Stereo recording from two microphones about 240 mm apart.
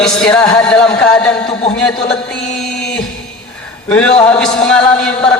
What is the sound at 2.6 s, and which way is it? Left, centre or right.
Music, centre.